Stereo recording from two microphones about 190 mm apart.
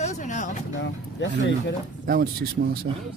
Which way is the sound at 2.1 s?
45° right (ahead or behind).